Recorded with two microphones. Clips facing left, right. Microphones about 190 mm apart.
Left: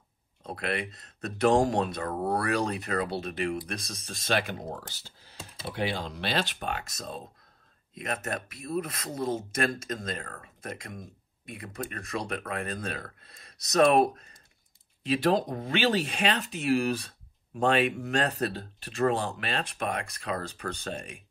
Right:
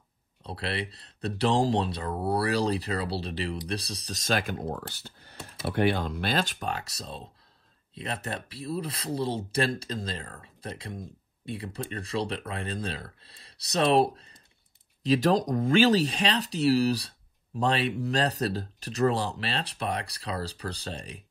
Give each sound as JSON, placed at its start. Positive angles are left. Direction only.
{"t": 0.4, "sound": "speech", "side_deg": -30}
{"t": 15.0, "sound": "speech", "side_deg": -40}